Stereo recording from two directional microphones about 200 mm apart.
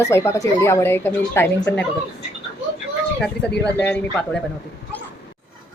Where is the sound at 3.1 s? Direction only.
5° left (ahead or behind).